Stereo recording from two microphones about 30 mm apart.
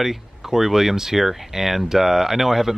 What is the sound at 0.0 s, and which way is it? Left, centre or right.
Speech, centre.